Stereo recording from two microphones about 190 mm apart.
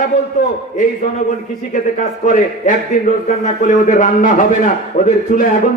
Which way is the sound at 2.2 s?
45° left (ahead or behind).